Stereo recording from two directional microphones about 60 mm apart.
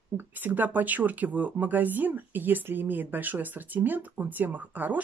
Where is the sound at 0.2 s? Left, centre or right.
Right.